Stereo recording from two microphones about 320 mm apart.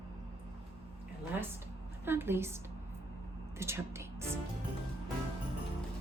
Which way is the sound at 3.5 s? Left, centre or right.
Centre.